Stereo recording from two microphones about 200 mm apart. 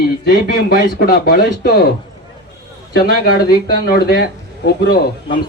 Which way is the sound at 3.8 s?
50° left (ahead or behind).